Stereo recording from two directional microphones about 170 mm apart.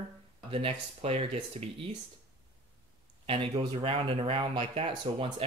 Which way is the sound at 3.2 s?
30° right (ahead or behind).